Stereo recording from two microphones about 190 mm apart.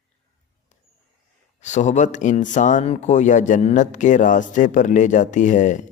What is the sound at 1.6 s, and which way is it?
Speech, 40° left (ahead or behind).